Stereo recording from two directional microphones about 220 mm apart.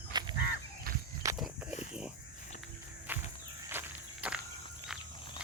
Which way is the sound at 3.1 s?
10° right (ahead or behind).